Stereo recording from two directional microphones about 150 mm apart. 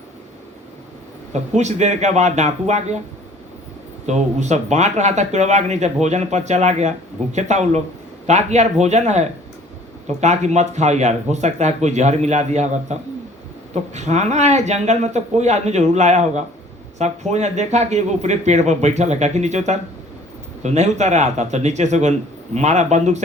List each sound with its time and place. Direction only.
1.3 s speech: 50° right (ahead or behind)
4.0 s speech: 50° right (ahead or behind)